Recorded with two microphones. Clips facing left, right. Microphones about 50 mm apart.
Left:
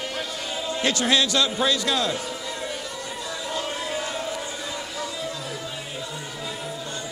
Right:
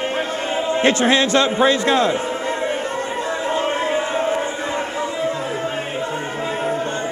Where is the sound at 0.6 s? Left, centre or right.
Right.